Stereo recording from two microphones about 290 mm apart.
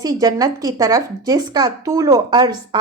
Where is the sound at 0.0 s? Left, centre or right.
Centre.